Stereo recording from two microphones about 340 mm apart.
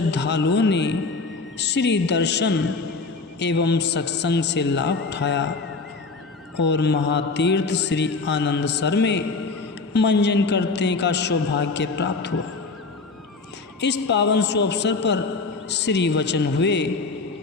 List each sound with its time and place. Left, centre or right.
0.1 s mantra: left
6.6 s mantra: left
13.8 s mantra: left